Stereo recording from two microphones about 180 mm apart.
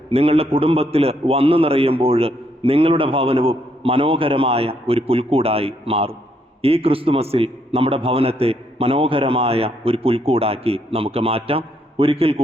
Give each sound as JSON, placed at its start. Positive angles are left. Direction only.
{"t": 0.1, "sound": "a man's voice", "side_deg": -35}